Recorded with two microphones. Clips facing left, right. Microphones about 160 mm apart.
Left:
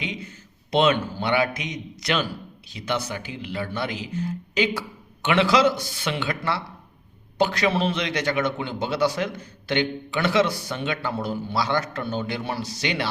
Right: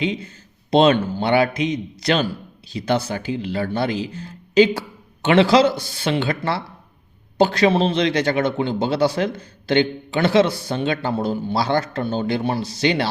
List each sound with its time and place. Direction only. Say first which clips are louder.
0.0 s a man's voice: right 9 dB; 30° right (ahead or behind)